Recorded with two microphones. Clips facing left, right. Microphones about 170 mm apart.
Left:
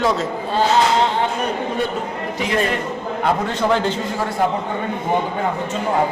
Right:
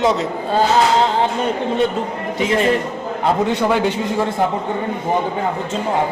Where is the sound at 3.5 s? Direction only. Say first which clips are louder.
Right 2 dB; 15° right (ahead or behind).